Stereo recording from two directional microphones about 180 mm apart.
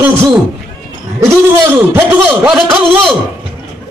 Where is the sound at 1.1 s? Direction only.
15° right (ahead or behind).